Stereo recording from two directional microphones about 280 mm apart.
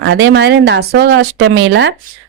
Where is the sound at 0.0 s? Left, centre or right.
Right.